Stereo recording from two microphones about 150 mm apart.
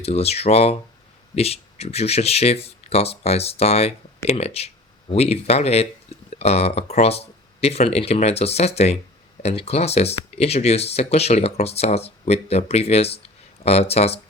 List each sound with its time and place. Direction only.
0.0 s speech: 45° left (ahead or behind)